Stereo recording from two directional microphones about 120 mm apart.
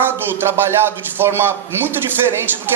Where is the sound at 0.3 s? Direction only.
20° right (ahead or behind).